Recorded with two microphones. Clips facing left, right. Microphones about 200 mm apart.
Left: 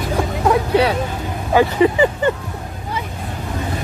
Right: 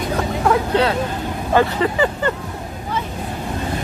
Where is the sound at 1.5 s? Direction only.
15° left (ahead or behind).